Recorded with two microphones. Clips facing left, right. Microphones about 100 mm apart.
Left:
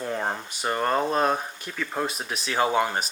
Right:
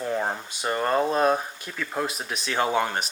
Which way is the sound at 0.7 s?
Centre (ahead or behind).